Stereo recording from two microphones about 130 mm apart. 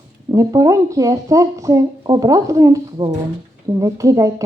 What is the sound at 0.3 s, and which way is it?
Speech, 25° right (ahead or behind).